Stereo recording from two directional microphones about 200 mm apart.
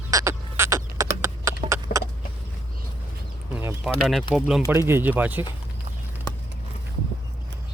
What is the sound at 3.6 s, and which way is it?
Bird, 10° right (ahead or behind).